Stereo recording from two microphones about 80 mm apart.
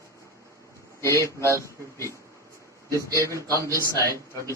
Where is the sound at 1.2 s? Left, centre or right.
Right.